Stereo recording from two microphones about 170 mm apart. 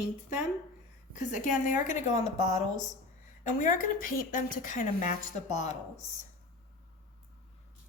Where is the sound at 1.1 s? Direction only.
50° left (ahead or behind).